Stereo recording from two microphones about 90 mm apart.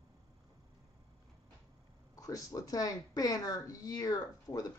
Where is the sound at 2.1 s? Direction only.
40° left (ahead or behind).